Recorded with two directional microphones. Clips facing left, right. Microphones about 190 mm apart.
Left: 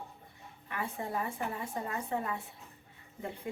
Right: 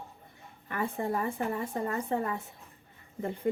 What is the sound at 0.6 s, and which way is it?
Speech, 50° right (ahead or behind).